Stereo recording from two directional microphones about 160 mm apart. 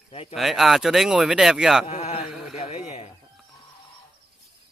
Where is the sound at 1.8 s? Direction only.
40° left (ahead or behind).